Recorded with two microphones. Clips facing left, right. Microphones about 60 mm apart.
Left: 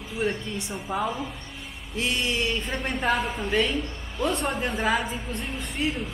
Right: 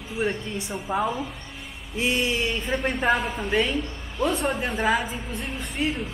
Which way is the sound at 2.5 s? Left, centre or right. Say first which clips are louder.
Right 3 dB; centre.